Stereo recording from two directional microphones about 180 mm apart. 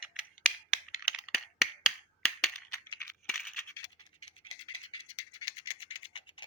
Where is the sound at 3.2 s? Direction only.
Centre (ahead or behind).